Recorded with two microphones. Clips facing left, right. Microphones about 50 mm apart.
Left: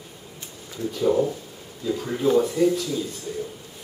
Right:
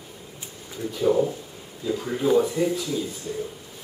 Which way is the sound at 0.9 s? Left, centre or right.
Centre.